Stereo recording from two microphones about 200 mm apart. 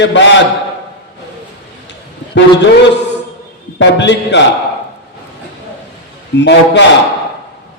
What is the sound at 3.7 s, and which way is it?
Speech, 60° left (ahead or behind).